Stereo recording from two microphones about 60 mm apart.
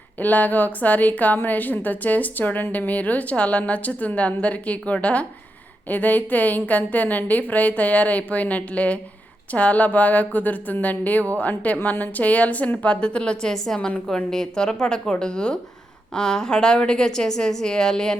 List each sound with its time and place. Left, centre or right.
0.2 s a woman's voice: left; by 18.2 s centre